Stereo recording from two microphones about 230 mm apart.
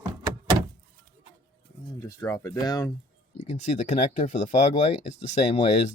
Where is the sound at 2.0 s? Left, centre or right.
Centre.